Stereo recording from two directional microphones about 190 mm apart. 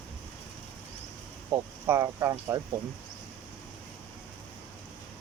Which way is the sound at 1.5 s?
15° right (ahead or behind).